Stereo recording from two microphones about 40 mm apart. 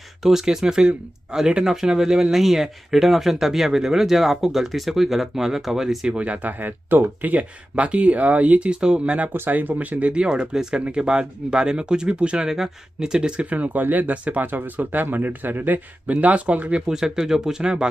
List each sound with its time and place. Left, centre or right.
0.2 s speech: centre
6.1 s speech: right
7.7 s speech: right
9.3 s speech: right
10.1 s speech: right
12.4 s speech: centre
13.5 s speech: right
14.1 s speech: right
14.4 s speech: right
16.1 s speech: right
16.8 s speech: centre